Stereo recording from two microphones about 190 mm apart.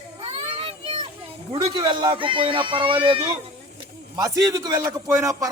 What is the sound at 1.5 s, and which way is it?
Speech, 20° right (ahead or behind).